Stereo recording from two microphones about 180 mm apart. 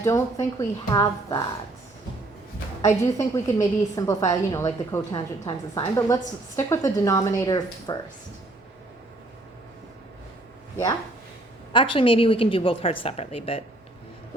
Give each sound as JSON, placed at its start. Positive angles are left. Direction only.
{"t": 0.0, "sound": "a woman's voice", "side_deg": 15}
{"t": 2.8, "sound": "a woman's voice", "side_deg": 15}
{"t": 5.1, "sound": "a woman's voice", "side_deg": 30}
{"t": 11.7, "sound": "a woman's voice", "side_deg": 30}